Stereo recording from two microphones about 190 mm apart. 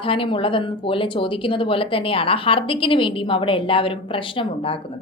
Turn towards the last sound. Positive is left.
turn(degrees=30)  # may be behind; listen again after turning